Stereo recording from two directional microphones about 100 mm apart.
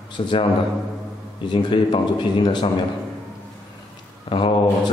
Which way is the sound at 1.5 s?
50° left (ahead or behind).